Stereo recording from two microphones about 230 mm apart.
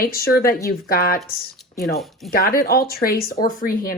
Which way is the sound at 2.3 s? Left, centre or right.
Left.